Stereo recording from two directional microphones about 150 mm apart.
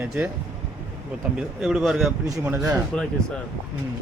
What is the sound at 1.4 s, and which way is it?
Speech, 5° right (ahead or behind).